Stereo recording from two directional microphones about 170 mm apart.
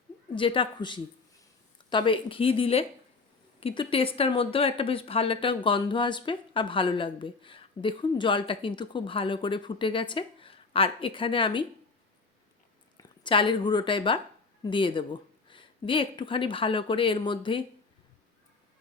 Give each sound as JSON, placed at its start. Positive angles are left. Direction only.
{"t": 0.3, "sound": "speech", "side_deg": 30}
{"t": 13.0, "sound": "a woman's voice", "side_deg": 30}